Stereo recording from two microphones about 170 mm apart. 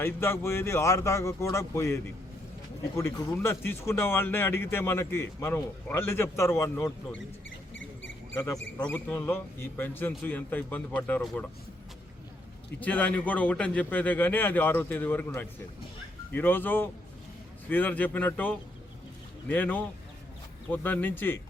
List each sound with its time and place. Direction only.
0.0 s speech: 15° left (ahead or behind)
7.7 s mouse: 90° left
8.9 s speech: 10° left (ahead or behind)
12.8 s speech: 10° left (ahead or behind)